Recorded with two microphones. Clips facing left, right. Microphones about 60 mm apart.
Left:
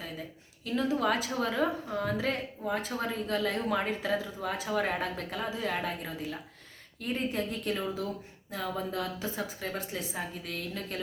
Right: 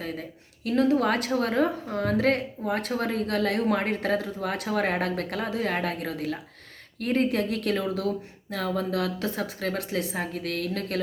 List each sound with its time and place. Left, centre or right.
0.0 s a woman's voice: right